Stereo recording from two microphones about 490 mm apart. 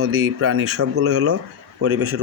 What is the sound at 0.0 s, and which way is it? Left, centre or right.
Speech, right.